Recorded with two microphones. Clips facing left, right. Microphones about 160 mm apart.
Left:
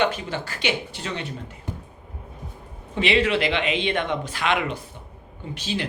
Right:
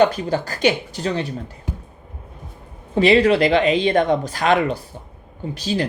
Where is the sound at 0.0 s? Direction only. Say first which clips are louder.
Right 7 dB; 40° right (ahead or behind).